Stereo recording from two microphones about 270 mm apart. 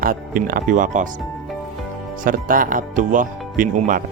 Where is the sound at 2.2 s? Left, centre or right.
Right.